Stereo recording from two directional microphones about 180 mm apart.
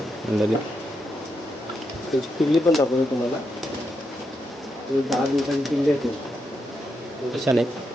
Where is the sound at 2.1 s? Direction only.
Centre (ahead or behind).